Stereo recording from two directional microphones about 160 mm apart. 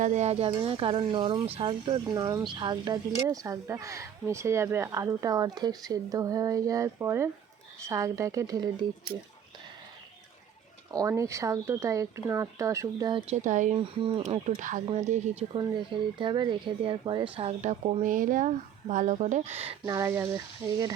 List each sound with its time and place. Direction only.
0.0 s speech: 45° right (ahead or behind); by 8.7 s 20° right (ahead or behind)
10.9 s speech: 20° right (ahead or behind)
13.2 s speech: 50° right (ahead or behind)
15.5 s speech: 30° right (ahead or behind)
17.3 s speech: 45° right (ahead or behind)
19.8 s speech: 20° right (ahead or behind)